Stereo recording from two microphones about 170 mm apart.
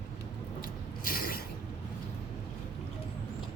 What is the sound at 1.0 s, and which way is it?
Mechanisms, 60° left (ahead or behind).